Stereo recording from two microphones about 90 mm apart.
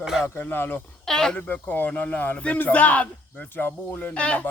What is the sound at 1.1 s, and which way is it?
Speech, 5° left (ahead or behind).